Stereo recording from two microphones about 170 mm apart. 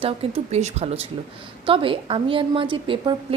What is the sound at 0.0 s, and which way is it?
A woman's voice, 35° right (ahead or behind).